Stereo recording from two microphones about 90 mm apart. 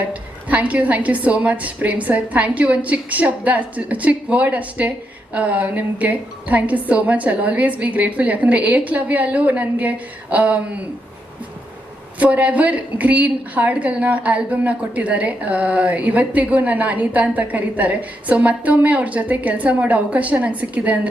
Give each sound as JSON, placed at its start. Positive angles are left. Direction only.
{"t": 0.1, "sound": "a woman's voice", "side_deg": -15}
{"t": 12.2, "sound": "a woman's voice", "side_deg": -15}